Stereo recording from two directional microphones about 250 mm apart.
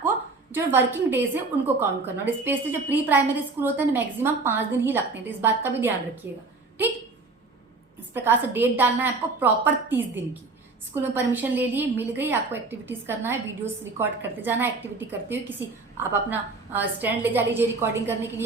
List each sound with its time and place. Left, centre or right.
0.5 s a woman's voice: centre
8.1 s a woman's voice: centre